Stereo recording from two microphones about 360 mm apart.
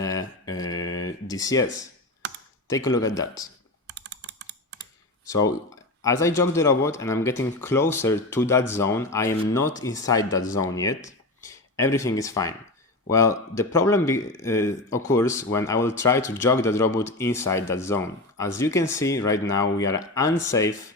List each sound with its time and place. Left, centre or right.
0.0 s speech: centre
3.8 s computer keyboard: right
6.0 s speech: centre